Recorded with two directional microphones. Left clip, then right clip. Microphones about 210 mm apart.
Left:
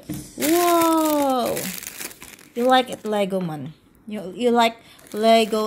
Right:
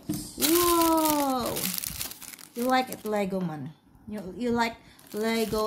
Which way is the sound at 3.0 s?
15° left (ahead or behind).